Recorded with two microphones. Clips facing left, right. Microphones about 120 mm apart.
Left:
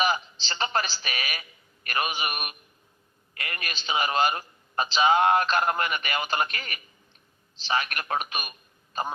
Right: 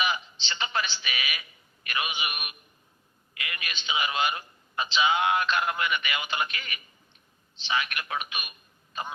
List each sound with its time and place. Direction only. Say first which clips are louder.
0.0 s a woman's voice: left 4 dB; 40° left (ahead or behind)